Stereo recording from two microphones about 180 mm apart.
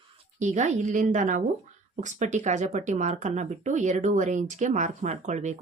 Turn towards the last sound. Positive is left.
turn(degrees=-40)  # may be behind; listen again after turning